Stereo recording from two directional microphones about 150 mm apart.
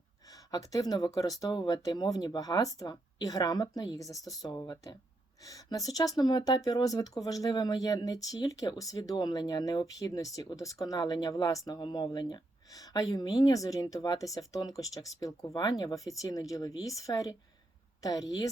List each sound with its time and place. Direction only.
0.3 s speech: 25° left (ahead or behind)
4.2 s speech: centre (ahead or behind)
4.4 s speech: 25° left (ahead or behind)